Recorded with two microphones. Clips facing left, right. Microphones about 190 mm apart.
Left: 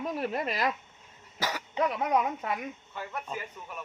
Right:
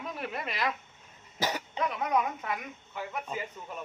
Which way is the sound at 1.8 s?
35° left (ahead or behind).